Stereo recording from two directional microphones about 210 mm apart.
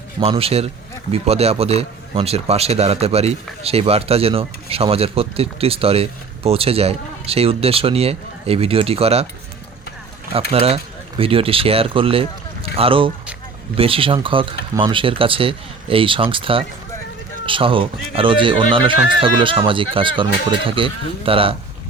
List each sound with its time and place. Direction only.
0.2 s speech: 30° right (ahead or behind)
10.5 s speech: 30° right (ahead or behind)